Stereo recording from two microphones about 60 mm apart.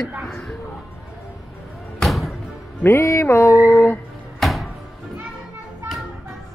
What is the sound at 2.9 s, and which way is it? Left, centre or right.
Speech, left.